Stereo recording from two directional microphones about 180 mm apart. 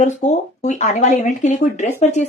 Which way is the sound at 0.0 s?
40° left (ahead or behind).